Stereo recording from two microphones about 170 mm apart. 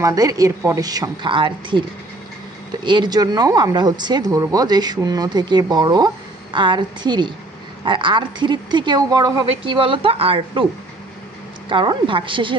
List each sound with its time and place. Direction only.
0.0 s speech: 20° right (ahead or behind)
11.7 s speech: 30° right (ahead or behind)